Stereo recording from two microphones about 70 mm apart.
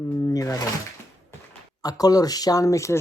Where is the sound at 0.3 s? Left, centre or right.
Left.